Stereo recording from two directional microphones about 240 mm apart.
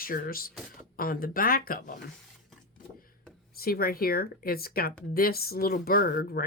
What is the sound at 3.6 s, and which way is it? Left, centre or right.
Speech, left.